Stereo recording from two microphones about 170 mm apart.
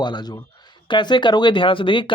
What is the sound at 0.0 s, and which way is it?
Speech, 25° left (ahead or behind).